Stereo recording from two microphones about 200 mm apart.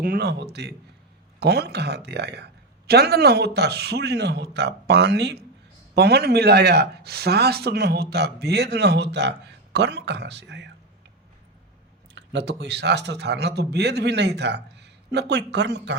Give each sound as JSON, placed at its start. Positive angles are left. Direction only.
{"t": 0.0, "sound": "speech", "side_deg": -50}
{"t": 12.1, "sound": "speech", "side_deg": -60}